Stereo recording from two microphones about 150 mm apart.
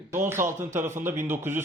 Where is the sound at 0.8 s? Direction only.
15° right (ahead or behind).